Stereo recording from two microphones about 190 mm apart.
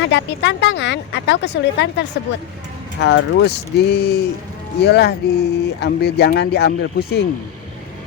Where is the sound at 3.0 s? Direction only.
65° left (ahead or behind).